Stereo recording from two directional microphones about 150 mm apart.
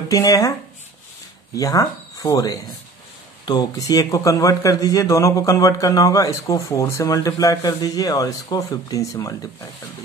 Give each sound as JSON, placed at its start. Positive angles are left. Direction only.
{"t": 0.1, "sound": "speech", "side_deg": 25}
{"t": 1.5, "sound": "speech", "side_deg": 25}